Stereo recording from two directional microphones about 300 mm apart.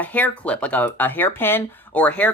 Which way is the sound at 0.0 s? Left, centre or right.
Centre.